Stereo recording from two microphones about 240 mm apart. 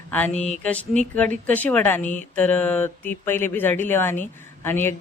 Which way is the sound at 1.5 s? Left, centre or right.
Centre.